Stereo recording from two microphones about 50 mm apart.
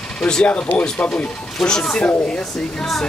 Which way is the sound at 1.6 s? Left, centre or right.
Centre.